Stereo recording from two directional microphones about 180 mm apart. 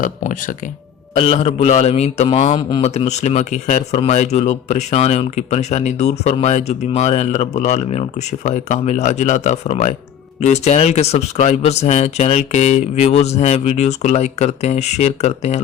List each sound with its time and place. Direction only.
0.0 s speech: 50° left (ahead or behind)
1.1 s a man's voice: 30° left (ahead or behind)
2.6 s speech: 25° left (ahead or behind)
2.8 s a man's voice: 35° left (ahead or behind)